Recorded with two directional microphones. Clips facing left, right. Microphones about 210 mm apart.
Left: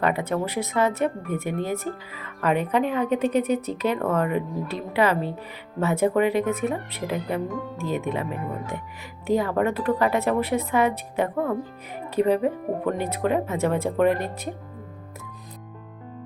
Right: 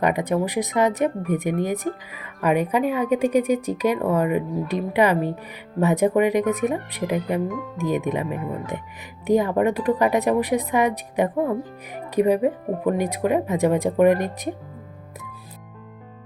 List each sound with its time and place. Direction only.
0.0 s speech: 15° right (ahead or behind)